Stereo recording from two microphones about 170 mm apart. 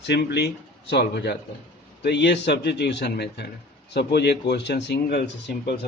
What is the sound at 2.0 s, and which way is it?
Speech, 85° left.